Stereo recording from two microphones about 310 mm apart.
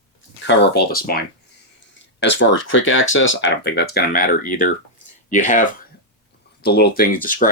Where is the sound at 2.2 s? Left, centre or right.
Left.